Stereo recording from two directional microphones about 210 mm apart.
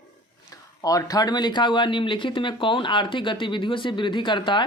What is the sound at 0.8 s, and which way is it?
Speech, 15° left (ahead or behind).